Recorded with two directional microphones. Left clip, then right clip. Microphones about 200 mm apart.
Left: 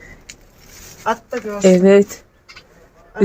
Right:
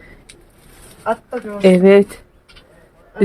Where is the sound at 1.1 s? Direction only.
50° left (ahead or behind).